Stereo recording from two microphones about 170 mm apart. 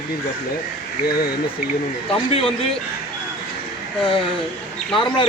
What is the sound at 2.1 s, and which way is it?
Speech, 35° left (ahead or behind).